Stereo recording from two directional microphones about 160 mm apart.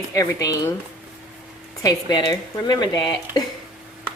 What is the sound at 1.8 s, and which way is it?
A woman's voice, 25° left (ahead or behind).